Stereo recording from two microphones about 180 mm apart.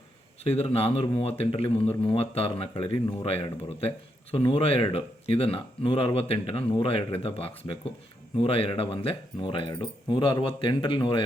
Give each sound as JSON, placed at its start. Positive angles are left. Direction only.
{"t": 0.4, "sound": "speech", "side_deg": 35}